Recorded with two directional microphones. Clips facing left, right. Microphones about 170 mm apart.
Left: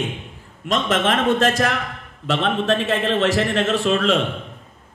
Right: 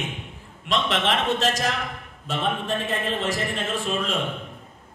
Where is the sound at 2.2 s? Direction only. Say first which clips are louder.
Left 6 dB; 80° left.